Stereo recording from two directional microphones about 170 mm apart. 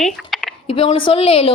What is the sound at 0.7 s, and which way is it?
Speech, 30° left (ahead or behind).